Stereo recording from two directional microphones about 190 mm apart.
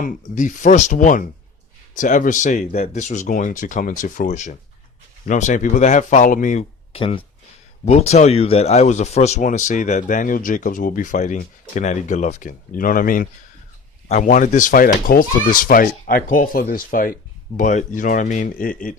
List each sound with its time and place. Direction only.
0.0 s speech: 45° left (ahead or behind)